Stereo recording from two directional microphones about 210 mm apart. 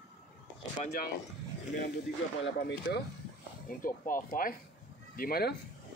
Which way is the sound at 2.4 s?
55° left (ahead or behind).